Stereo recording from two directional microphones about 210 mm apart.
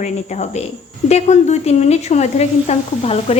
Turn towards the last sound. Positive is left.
turn(degrees=30)  # may be behind; listen again after turning